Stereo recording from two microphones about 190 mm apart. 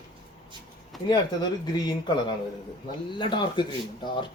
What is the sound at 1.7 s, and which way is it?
A man's voice, 25° left (ahead or behind).